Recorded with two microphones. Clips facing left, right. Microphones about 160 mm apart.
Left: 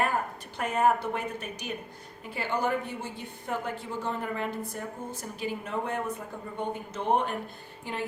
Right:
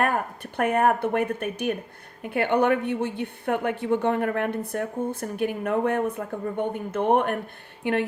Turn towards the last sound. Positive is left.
turn(degrees=-65)  # may be behind; listen again after turning